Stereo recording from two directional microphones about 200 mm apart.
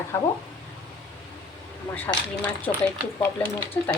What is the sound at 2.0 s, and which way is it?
Speech, 10° left (ahead or behind).